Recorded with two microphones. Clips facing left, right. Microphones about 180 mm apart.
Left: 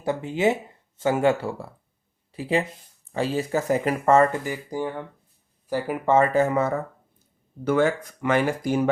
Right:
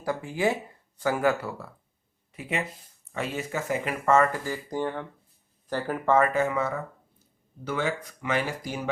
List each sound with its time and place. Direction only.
0.0 s speech: 25° left (ahead or behind)
4.3 s speech: 15° left (ahead or behind)
6.1 s speech: 25° left (ahead or behind); by 8.8 s 50° left (ahead or behind)